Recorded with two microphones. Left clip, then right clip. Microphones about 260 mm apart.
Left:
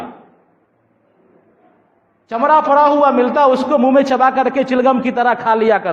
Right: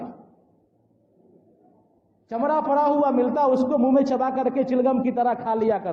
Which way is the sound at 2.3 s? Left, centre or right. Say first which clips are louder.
Left 10 dB; left.